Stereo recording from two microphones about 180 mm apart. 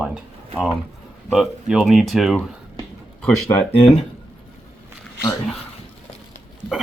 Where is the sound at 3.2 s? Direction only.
10° left (ahead or behind).